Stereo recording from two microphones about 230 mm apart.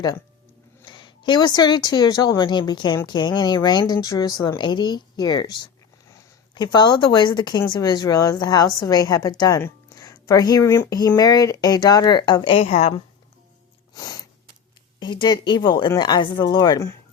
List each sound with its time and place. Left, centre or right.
0.9 s speech: centre
13.9 s a sound: centre
14.9 s speech: centre